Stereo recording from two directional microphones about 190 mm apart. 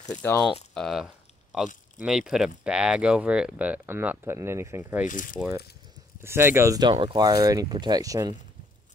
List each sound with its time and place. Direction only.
0.1 s speech: 10° left (ahead or behind)
0.7 s a sound: centre (ahead or behind)
2.0 s speech: 5° right (ahead or behind)
5.0 s speech: 45° left (ahead or behind)
6.2 s speech: 15° right (ahead or behind)